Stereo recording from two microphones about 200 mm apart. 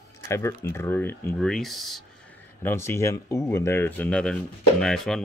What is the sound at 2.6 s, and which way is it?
Speech, 10° left (ahead or behind).